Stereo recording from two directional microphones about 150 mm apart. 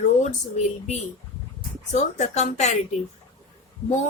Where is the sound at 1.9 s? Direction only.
50° left (ahead or behind).